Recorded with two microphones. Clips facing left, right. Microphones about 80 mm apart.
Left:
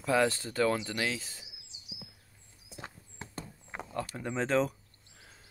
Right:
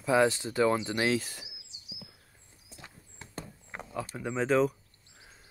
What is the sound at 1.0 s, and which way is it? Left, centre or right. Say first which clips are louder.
Speech: right 7 dB; right.